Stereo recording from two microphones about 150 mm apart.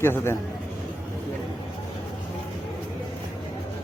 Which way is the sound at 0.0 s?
15° left (ahead or behind).